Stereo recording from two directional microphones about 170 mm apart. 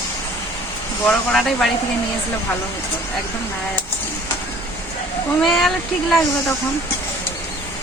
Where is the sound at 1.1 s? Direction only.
Centre (ahead or behind).